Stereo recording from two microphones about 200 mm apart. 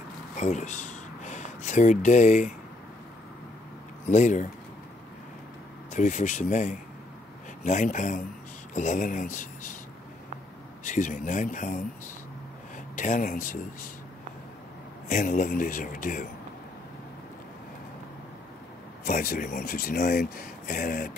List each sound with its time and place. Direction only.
0.4 s speech: 35° left (ahead or behind)
4.1 s speech: 35° left (ahead or behind)
5.9 s speech: 40° left (ahead or behind)
10.8 s speech: 40° left (ahead or behind)
12.9 s speech: 40° left (ahead or behind)
15.0 s speech: 40° left (ahead or behind)
19.0 s speech: 40° left (ahead or behind)